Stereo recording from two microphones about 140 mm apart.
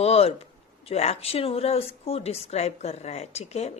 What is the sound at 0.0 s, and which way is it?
A man's voice, 45° left (ahead or behind).